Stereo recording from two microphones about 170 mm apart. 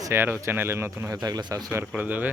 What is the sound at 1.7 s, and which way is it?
Speech, 10° right (ahead or behind).